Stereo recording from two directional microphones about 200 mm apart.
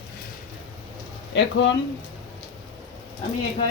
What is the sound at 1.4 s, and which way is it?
Speech, 65° left (ahead or behind).